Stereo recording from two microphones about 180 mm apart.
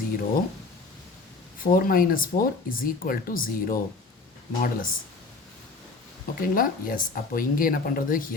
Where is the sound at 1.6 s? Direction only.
50° left (ahead or behind).